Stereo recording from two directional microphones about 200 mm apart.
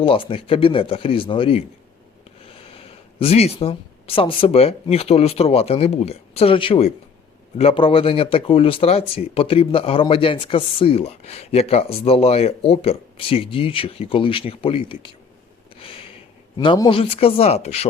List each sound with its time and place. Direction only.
0.0 s speech: 25° left (ahead or behind)
15.7 s a sound: 30° left (ahead or behind)
16.6 s speech: 20° left (ahead or behind)